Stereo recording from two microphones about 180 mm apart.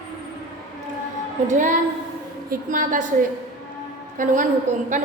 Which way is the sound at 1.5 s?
45° right (ahead or behind).